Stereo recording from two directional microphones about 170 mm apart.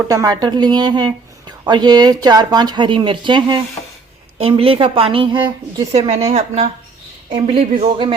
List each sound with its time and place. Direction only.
0.1 s a woman's voice: 20° right (ahead or behind)